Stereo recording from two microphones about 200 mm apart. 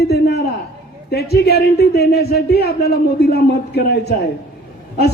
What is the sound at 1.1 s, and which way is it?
Speech, 55° left (ahead or behind).